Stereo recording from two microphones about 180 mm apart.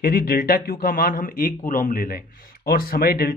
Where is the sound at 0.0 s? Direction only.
55° left (ahead or behind).